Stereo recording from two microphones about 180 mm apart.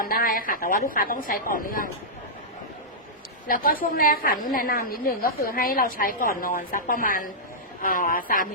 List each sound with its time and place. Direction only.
0.0 s a woman's voice: 50° left (ahead or behind)
3.4 s a woman's voice: 50° left (ahead or behind)